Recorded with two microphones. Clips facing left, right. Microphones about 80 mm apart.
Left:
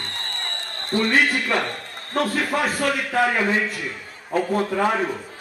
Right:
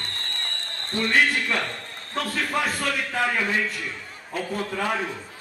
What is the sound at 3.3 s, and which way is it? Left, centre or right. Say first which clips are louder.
Speech: left 4 dB; left.